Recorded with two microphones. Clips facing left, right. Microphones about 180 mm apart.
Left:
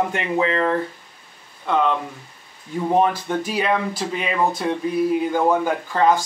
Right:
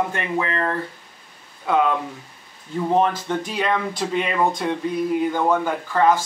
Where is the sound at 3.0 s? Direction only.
10° left (ahead or behind).